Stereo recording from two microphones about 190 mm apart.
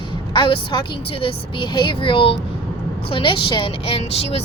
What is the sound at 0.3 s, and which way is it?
A woman's voice, 25° left (ahead or behind).